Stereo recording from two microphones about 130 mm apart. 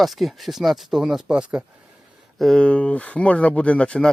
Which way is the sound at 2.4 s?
5° left (ahead or behind).